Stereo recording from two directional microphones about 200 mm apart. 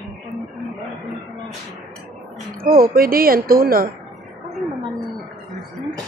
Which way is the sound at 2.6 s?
45° right (ahead or behind).